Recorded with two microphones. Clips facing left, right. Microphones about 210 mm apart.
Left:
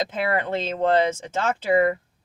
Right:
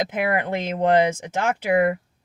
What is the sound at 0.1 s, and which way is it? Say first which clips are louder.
Speech: right 1 dB; 15° right (ahead or behind).